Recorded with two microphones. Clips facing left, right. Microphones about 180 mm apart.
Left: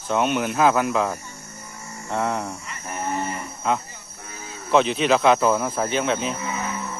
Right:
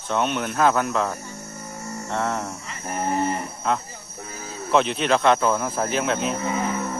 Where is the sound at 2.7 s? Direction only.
40° right (ahead or behind).